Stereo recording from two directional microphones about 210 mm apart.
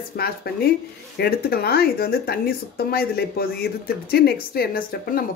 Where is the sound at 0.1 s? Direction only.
45° left (ahead or behind).